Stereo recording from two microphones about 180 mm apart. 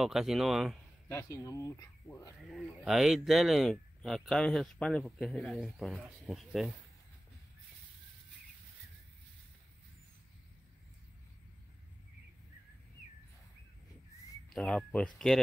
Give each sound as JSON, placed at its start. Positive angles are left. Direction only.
{"t": 0.0, "sound": "speech", "side_deg": 0}
{"t": 1.0, "sound": "speech", "side_deg": 15}
{"t": 2.5, "sound": "speech", "side_deg": 0}
{"t": 14.5, "sound": "speech", "side_deg": 5}